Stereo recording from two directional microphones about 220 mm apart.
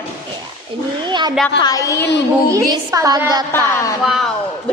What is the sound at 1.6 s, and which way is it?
Speech, 15° left (ahead or behind).